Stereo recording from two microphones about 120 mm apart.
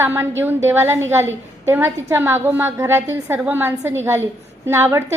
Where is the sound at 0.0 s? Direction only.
20° right (ahead or behind).